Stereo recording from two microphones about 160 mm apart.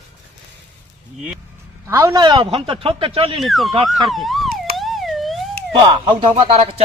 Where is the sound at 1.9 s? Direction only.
20° right (ahead or behind); by 3.4 s 35° right (ahead or behind).